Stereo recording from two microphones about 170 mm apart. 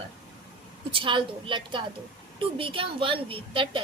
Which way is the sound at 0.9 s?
30° right (ahead or behind).